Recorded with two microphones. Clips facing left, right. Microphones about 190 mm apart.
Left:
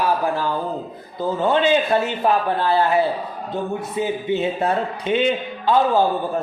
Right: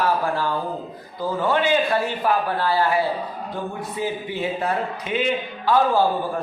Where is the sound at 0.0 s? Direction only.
15° left (ahead or behind).